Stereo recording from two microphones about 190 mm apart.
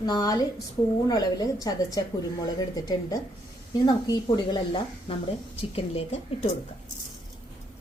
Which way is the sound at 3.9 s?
25° left (ahead or behind).